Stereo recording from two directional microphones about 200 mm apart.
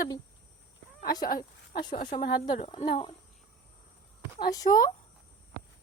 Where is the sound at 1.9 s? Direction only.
40° left (ahead or behind).